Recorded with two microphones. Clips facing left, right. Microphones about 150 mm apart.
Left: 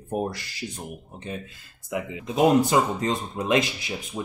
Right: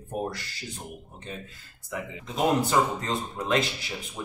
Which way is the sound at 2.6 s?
15° left (ahead or behind).